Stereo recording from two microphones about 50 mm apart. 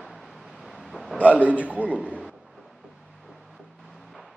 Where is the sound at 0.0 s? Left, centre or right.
Centre.